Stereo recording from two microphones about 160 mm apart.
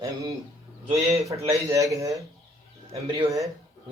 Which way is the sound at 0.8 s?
40° right (ahead or behind).